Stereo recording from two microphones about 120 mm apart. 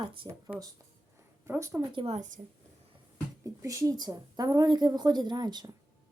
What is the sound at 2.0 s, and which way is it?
Speech, 80° right.